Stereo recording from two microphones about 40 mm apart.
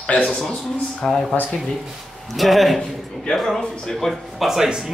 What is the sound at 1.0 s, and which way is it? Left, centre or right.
Speech, centre.